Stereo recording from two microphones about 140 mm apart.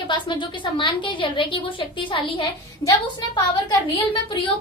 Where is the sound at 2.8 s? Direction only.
25° left (ahead or behind).